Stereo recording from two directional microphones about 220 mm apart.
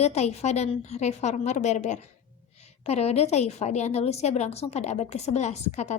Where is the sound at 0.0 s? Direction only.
30° left (ahead or behind).